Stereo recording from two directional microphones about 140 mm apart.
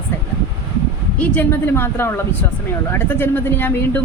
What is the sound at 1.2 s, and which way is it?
Speech, 10° left (ahead or behind).